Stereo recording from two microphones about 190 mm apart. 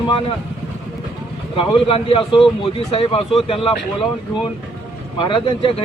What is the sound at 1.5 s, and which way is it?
Speech, 25° left (ahead or behind).